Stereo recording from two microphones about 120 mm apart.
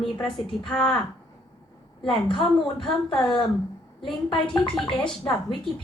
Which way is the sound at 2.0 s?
45° left (ahead or behind).